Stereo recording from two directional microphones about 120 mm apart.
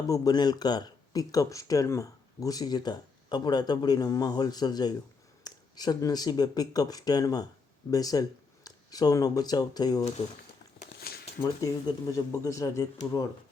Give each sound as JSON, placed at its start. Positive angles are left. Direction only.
{"t": 0.1, "sound": "speech", "side_deg": 35}
{"t": 10.2, "sound": "speech", "side_deg": 65}
{"t": 11.6, "sound": "speech", "side_deg": 30}